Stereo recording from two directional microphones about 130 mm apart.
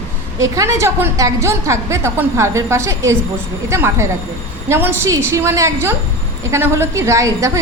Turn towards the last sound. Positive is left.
turn(degrees=-25)  # may be behind; listen again after turning